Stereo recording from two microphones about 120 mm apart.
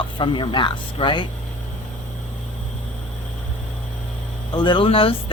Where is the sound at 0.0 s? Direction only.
40° left (ahead or behind).